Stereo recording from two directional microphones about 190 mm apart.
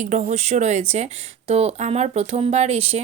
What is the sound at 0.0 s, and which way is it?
Speech, 40° right (ahead or behind).